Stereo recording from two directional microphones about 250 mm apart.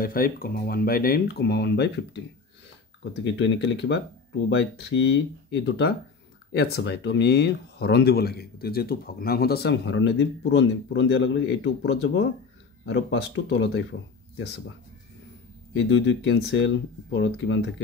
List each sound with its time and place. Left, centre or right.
0.0 s speech: left
3.3 s speech: left
15.7 s speech: left